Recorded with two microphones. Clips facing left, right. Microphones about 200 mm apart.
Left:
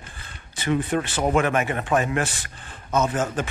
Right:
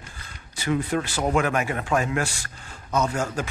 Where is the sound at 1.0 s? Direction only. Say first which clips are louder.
Left 2 dB; 15° left (ahead or behind).